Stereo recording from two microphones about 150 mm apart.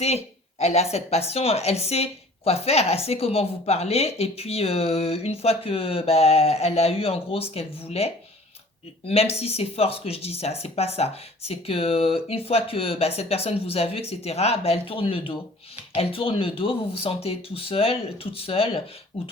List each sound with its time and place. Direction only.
0.6 s speech: 45° left (ahead or behind)